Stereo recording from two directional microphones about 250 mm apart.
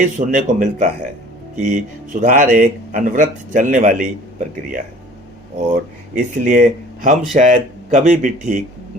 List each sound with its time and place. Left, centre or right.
0.3 s speech: right